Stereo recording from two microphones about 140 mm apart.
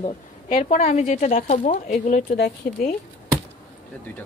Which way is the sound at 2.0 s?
65° left (ahead or behind).